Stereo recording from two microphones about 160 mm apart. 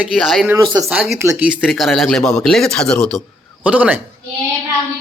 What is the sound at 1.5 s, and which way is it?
Speech, centre (ahead or behind).